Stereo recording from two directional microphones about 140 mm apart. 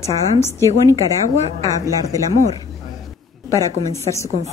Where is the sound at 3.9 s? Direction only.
20° left (ahead or behind).